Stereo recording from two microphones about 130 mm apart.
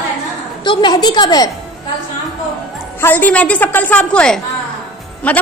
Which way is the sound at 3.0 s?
15° left (ahead or behind).